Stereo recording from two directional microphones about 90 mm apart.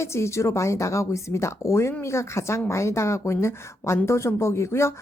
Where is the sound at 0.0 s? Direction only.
30° left (ahead or behind).